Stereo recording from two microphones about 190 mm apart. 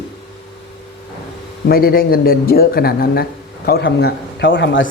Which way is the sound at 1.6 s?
55° left (ahead or behind).